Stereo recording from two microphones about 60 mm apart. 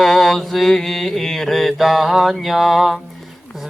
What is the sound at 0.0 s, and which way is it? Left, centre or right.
Mantra, centre.